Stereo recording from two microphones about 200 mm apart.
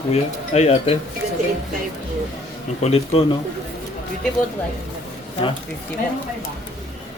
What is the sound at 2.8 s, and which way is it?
Speech, 30° left (ahead or behind).